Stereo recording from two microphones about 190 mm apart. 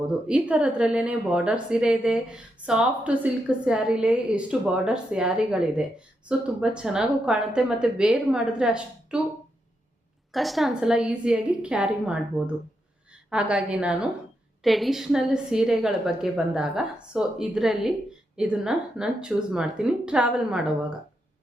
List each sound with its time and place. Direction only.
0.3 s a woman's voice: 5° right (ahead or behind)
10.3 s a woman's voice: centre (ahead or behind)
13.3 s a woman's voice: 5° right (ahead or behind)